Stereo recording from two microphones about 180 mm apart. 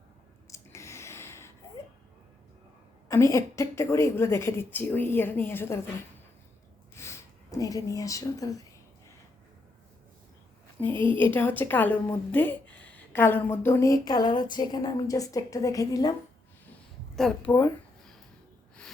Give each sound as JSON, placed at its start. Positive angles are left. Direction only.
{"t": 0.4, "sound": "a sound", "side_deg": 15}
{"t": 3.1, "sound": "a woman's voice", "side_deg": 15}
{"t": 6.9, "sound": "speech", "side_deg": 15}
{"t": 10.8, "sound": "a woman's voice", "side_deg": 10}
{"t": 17.2, "sound": "a woman's voice", "side_deg": 5}